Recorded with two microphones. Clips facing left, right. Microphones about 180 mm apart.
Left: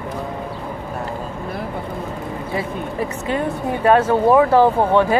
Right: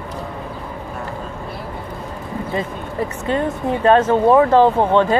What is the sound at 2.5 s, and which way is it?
Speech, 10° left (ahead or behind).